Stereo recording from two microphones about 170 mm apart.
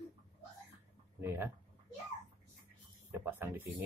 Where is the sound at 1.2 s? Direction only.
15° right (ahead or behind).